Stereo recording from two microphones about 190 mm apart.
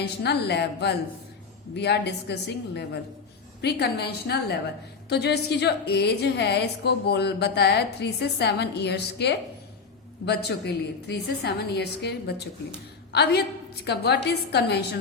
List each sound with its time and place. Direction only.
0.0 s a woman's voice: 60° left (ahead or behind)
11.1 s a woman's voice: 60° left (ahead or behind)